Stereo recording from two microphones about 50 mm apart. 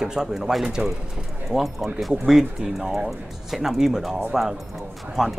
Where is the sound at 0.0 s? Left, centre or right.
Centre.